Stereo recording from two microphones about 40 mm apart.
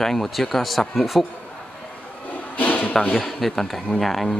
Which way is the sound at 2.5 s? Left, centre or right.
Left.